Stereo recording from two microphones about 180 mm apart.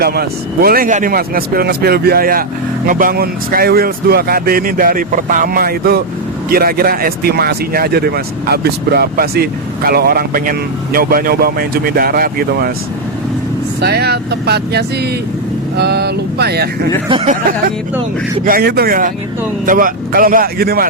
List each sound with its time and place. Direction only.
0.0 s speech: 60° right (ahead or behind)
13.8 s speech: 65° right (ahead or behind)
17.1 s speech: 35° right (ahead or behind)
18.4 s speech: 55° right (ahead or behind)